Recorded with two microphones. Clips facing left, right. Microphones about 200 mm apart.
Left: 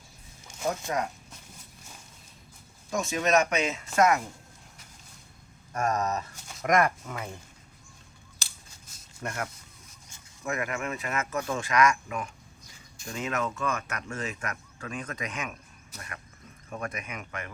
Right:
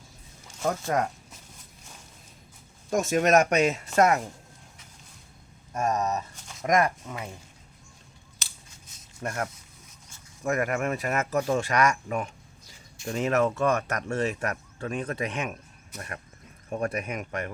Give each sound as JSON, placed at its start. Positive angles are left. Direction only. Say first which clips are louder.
{"t": 0.9, "sound": "speech", "louder": "right 5 dB", "side_deg": -50}
{"t": 2.9, "sound": "speech", "louder": "right 4 dB", "side_deg": -45}
{"t": 5.7, "sound": "speech", "louder": "right 1 dB", "side_deg": -20}
{"t": 9.2, "sound": "speech", "louder": "right 3 dB", "side_deg": -30}
{"t": 10.4, "sound": "speech", "louder": "right 5 dB", "side_deg": -45}